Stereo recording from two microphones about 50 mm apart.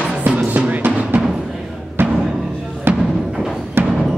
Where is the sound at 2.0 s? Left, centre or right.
Right.